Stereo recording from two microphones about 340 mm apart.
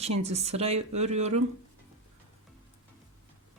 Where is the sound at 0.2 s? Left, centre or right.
Centre.